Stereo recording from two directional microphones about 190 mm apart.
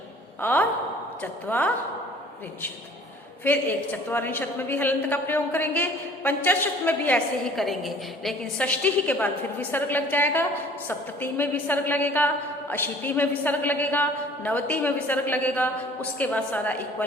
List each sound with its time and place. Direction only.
0.4 s a woman's voice: 10° left (ahead or behind)
3.4 s a woman's voice: 10° left (ahead or behind)